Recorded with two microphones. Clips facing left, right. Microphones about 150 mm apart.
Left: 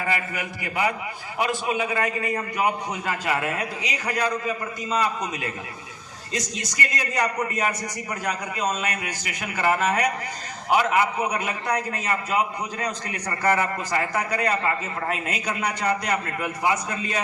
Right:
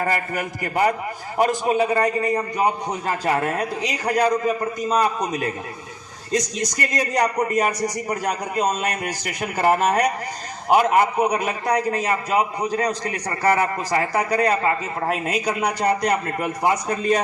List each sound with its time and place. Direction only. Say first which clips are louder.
0.0 s a man's voice: right 4 dB; 45° right (ahead or behind)
6.9 s a man's voice: right 5 dB; 40° right (ahead or behind)